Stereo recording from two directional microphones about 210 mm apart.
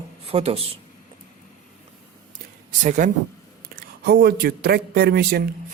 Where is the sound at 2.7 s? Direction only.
40° right (ahead or behind).